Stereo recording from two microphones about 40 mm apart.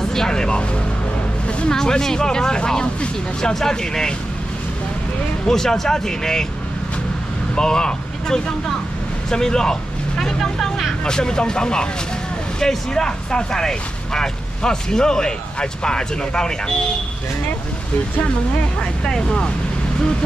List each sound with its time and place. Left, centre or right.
0.0 s speech: centre
1.7 s speech: centre
5.5 s speech: centre
7.5 s speech: centre
19.0 s speech: centre